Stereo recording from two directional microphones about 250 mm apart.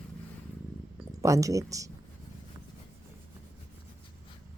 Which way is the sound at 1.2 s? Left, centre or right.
Centre.